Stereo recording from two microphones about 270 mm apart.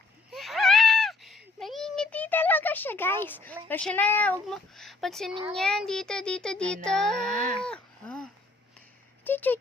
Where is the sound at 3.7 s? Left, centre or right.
Centre.